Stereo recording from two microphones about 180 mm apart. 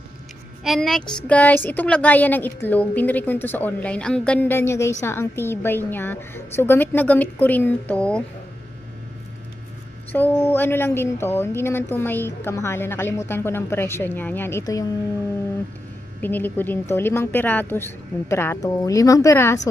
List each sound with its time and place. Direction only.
0.6 s a woman's voice: centre (ahead or behind)
10.1 s a woman's voice: 10° left (ahead or behind)
16.2 s a woman's voice: 10° left (ahead or behind)